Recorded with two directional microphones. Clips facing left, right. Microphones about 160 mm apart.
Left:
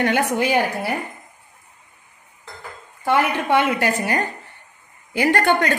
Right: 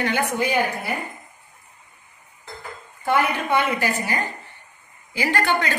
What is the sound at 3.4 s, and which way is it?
A woman's voice, 70° left (ahead or behind).